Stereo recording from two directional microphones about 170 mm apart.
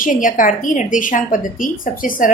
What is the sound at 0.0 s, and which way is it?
A woman's voice, 50° left (ahead or behind).